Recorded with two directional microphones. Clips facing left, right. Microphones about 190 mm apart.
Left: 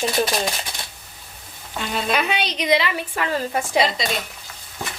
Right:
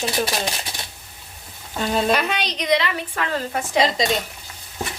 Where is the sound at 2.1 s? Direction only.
5° left (ahead or behind).